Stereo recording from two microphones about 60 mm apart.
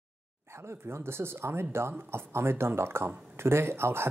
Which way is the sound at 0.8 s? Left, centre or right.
Right.